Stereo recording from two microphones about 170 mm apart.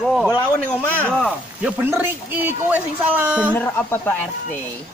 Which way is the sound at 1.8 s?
10° right (ahead or behind).